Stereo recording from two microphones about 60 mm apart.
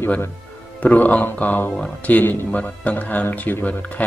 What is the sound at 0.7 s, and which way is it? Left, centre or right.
Speech, left.